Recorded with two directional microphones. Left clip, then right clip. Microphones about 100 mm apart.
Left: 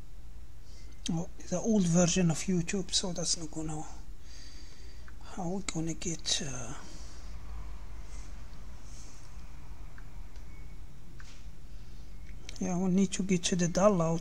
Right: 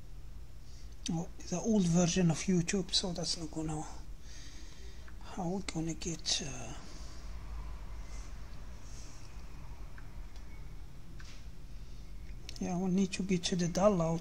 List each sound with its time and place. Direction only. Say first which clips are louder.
1.0 s speech: left 2 dB; 45° left (ahead or behind)
2.2 s speech: left 1 dB; 10° left (ahead or behind)
2.5 s speech: even; centre (ahead or behind)
2.9 s speech: left 4 dB; 30° left (ahead or behind)
3.3 s a sound: even; 10° left (ahead or behind)
5.2 s a sound: left 1 dB; 10° left (ahead or behind)
5.5 s speech: left 3 dB; 35° left (ahead or behind)
12.4 s speech: left 3 dB; 40° left (ahead or behind)